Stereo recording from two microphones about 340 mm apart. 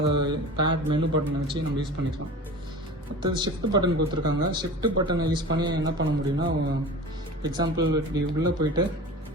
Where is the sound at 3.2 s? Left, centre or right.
Centre.